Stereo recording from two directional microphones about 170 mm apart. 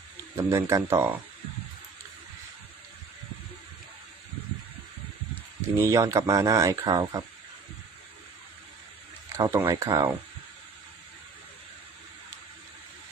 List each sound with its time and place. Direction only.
0.3 s speech: 15° right (ahead or behind)
5.7 s speech: 15° right (ahead or behind)
9.4 s speech: 15° right (ahead or behind)